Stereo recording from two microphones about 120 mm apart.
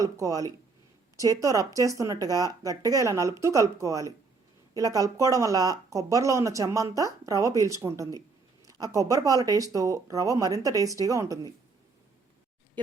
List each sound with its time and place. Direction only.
0.0 s speech: 30° right (ahead or behind)